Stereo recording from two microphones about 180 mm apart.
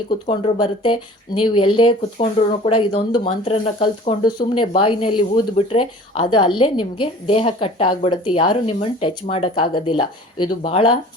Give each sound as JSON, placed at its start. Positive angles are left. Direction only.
{"t": 0.3, "sound": "speech", "side_deg": 25}